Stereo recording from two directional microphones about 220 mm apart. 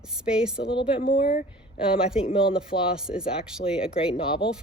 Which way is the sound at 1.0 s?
40° left (ahead or behind).